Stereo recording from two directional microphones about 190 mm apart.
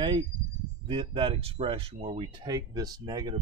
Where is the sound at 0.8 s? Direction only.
25° right (ahead or behind).